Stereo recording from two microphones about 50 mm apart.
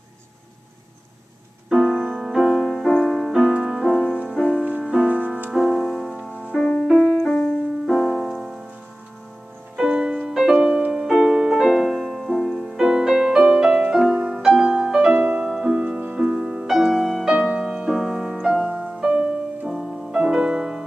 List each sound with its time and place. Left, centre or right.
1.7 s music: centre
5.0 s music: right
5.5 s music: centre
6.9 s music: centre
7.2 s music: centre
7.8 s music: centre
9.8 s music: centre
12.8 s music: centre
15.7 s music: right
17.3 s music: centre